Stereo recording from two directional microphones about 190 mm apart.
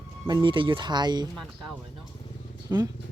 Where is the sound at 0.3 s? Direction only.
25° right (ahead or behind).